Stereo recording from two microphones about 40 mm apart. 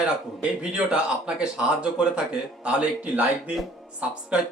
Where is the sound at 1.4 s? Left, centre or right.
Right.